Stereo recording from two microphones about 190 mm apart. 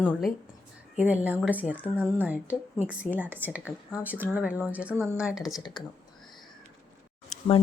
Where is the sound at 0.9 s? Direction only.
10° right (ahead or behind).